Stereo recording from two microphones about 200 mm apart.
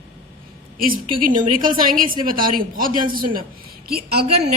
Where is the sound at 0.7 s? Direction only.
45° right (ahead or behind).